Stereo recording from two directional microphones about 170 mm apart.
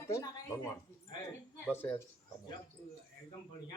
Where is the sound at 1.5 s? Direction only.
15° left (ahead or behind).